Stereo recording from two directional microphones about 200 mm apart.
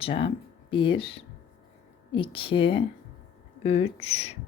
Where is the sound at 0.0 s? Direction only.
25° left (ahead or behind).